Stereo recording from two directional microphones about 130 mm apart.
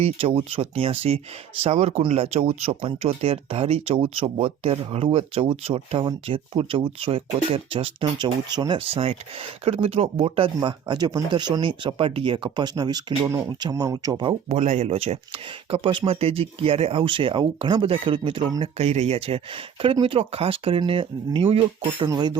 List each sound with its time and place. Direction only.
0.0 s speech: 50° right (ahead or behind); by 8.8 s 30° right (ahead or behind)
8.8 s speech: 45° right (ahead or behind); by 14.3 s 30° right (ahead or behind)
14.5 s speech: 60° right (ahead or behind)
14.8 s speech: 50° right (ahead or behind)
18.6 s speech: 55° right (ahead or behind)
22.1 s speech: 30° right (ahead or behind)